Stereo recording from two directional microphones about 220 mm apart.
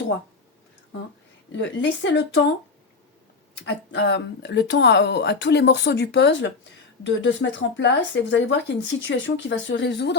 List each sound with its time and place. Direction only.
1.5 s a woman's voice: 55° left (ahead or behind)
3.9 s speech: 50° left (ahead or behind)